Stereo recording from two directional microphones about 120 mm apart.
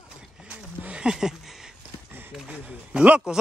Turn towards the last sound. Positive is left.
turn(degrees=-10)  # may be behind; listen again after turning